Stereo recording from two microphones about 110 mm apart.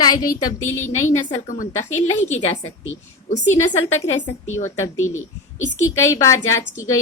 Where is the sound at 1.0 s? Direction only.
90° left.